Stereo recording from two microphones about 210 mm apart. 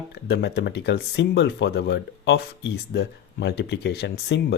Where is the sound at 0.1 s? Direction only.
50° left (ahead or behind).